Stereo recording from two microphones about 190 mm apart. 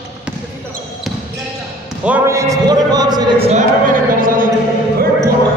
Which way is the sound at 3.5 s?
45° right (ahead or behind).